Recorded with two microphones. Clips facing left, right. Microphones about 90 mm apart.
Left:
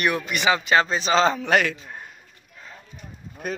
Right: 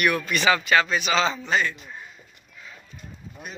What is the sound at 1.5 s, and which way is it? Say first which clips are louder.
Speech: left 4 dB; 70° left (ahead or behind).